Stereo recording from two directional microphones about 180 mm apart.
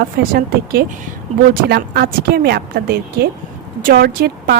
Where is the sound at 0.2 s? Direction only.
55° right (ahead or behind).